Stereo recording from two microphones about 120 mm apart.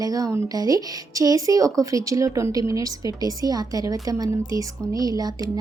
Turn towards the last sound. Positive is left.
turn(degrees=-30)  # may be behind; listen again after turning